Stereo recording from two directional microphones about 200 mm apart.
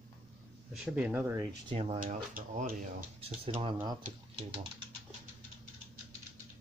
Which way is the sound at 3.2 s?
30° right (ahead or behind).